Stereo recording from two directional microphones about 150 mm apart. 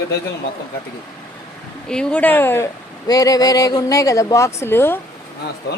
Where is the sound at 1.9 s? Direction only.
5° left (ahead or behind).